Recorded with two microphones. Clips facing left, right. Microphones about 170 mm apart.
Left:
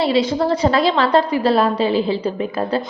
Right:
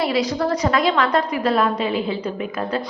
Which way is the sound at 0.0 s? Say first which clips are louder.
Left 3 dB; 25° left (ahead or behind).